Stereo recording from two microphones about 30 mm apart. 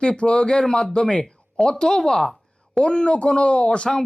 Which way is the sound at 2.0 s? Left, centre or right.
Centre.